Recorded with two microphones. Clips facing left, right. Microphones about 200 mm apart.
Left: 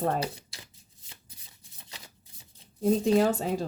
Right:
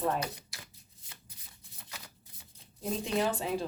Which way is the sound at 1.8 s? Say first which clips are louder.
Even; 25° left (ahead or behind).